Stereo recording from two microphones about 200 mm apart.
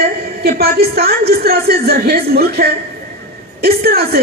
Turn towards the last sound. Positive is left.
turn(degrees=-50)  # may be behind; listen again after turning